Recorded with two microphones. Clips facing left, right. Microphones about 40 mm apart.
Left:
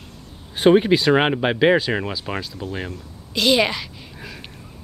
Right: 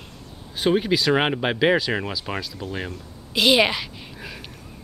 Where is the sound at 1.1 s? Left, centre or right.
Centre.